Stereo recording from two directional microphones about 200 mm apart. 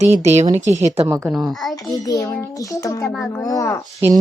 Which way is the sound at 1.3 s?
Centre (ahead or behind).